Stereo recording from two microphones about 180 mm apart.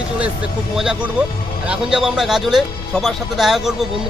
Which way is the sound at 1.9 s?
Centre (ahead or behind).